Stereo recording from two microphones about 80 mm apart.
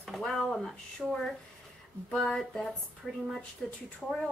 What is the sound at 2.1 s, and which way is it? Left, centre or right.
Speech, centre.